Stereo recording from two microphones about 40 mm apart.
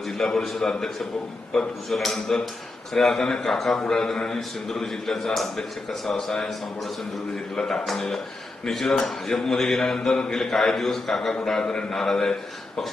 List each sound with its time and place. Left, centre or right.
0.2 s a man's voice: centre
7.5 s a man's voice: centre
11.6 s a man's voice: left
12.0 s a man's voice: centre